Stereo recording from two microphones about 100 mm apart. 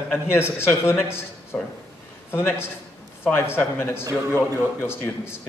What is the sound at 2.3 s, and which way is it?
A man's voice, 25° left (ahead or behind).